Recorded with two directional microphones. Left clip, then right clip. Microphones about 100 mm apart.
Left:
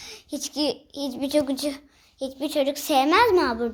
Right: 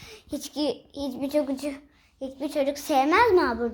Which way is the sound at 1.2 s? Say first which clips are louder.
Left 3 dB; 20° left (ahead or behind).